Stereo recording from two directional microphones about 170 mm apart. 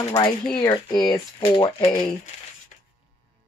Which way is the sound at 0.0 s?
20° left (ahead or behind).